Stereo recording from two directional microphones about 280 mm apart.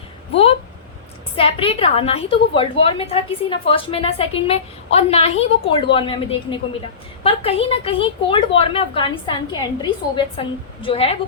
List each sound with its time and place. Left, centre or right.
1.4 s a woman's voice: centre
7.3 s a woman's voice: left